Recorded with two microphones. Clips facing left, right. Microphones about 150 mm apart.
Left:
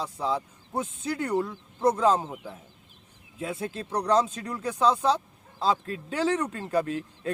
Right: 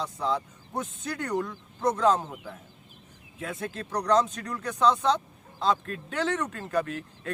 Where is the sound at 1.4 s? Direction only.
25° left (ahead or behind).